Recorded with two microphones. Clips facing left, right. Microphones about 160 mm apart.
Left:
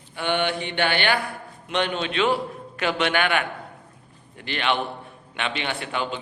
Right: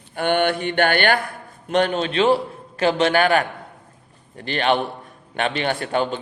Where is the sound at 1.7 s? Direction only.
40° right (ahead or behind).